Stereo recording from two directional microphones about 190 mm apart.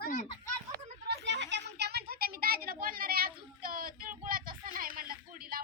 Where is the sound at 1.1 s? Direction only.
70° right (ahead or behind).